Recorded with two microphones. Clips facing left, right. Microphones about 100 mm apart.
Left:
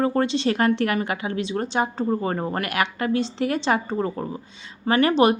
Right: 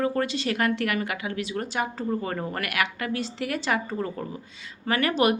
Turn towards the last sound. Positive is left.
turn(degrees=30)  # may be behind; listen again after turning